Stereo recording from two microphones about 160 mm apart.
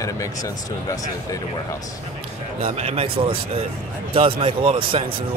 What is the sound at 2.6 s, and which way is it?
Speech, 35° right (ahead or behind).